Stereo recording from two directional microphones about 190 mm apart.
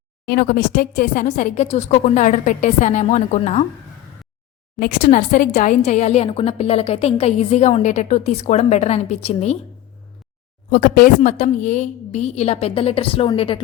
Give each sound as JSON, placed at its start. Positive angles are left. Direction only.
{"t": 0.3, "sound": "a woman's voice", "side_deg": 50}
{"t": 4.8, "sound": "a woman's voice", "side_deg": 45}
{"t": 10.7, "sound": "a woman's voice", "side_deg": 45}